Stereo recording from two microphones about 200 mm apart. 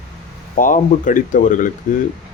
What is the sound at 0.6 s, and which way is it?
Speech, 40° left (ahead or behind).